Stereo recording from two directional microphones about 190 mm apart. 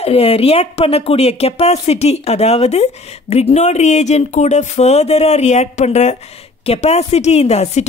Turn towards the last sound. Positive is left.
turn(degrees=35)  # may be behind; listen again after turning